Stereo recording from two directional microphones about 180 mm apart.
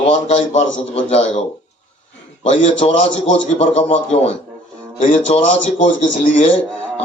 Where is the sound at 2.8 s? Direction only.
35° left (ahead or behind).